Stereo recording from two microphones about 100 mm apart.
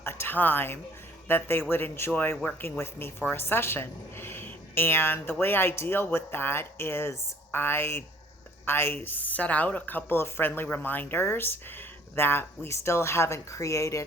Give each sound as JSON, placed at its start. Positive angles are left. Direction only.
{"t": 0.0, "sound": "speech", "side_deg": 25}